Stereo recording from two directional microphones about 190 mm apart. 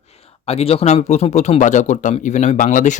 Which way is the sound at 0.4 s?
30° left (ahead or behind).